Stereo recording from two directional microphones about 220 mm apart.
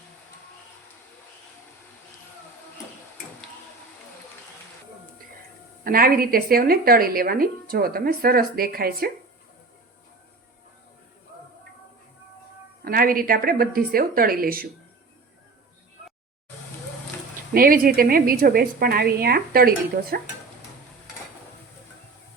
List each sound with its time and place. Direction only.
5.8 s a woman's voice: 40° right (ahead or behind)
12.8 s a woman's voice: 40° right (ahead or behind)
17.5 s a woman's voice: 40° right (ahead or behind)